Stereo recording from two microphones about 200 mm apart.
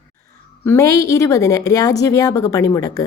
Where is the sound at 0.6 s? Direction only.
15° left (ahead or behind).